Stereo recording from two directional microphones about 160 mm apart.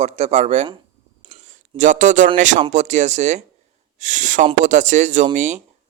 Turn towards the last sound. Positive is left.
turn(degrees=-50)  # may be behind; listen again after turning